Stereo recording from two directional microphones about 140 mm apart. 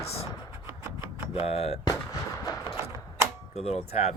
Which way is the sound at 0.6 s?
15° right (ahead or behind).